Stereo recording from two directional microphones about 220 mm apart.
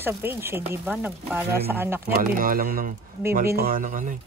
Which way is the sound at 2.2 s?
40° right (ahead or behind).